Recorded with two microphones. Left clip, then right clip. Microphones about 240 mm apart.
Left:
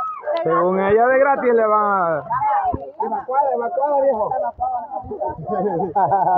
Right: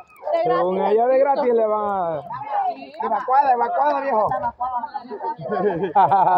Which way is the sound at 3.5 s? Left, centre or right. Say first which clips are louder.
Right 1 dB; right.